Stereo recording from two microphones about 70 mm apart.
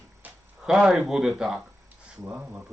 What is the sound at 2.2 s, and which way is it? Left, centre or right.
Speech, right.